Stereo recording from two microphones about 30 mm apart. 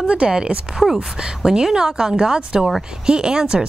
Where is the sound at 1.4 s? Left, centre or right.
Centre.